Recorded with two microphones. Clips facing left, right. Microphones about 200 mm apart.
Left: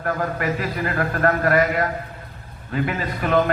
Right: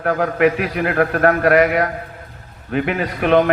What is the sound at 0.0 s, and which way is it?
A man's voice, 65° right (ahead or behind).